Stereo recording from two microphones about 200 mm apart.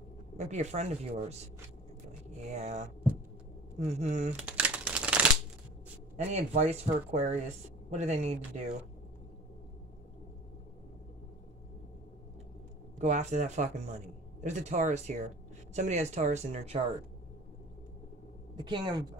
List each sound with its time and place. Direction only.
0.4 s a man's voice: 35° right (ahead or behind)
2.5 s a man's voice: 35° right (ahead or behind)
4.3 s shuffling cards: 5° right (ahead or behind)
6.1 s a man's voice: 35° right (ahead or behind)
13.0 s a man's voice: 35° right (ahead or behind)
18.6 s a woman's voice: 20° right (ahead or behind)